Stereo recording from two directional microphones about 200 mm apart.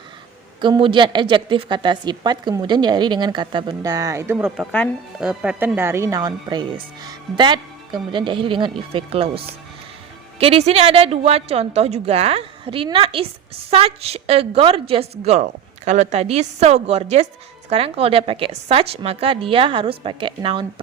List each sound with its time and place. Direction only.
0.6 s speech: 25° right (ahead or behind)
10.4 s a woman's voice: 30° right (ahead or behind)